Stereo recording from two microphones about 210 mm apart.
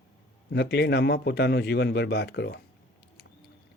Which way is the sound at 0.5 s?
50° left (ahead or behind).